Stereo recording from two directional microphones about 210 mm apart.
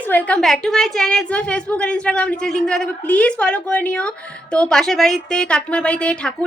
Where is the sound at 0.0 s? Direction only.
5° left (ahead or behind).